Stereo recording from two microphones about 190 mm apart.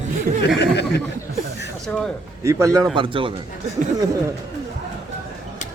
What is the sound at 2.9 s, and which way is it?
Speech, 25° right (ahead or behind).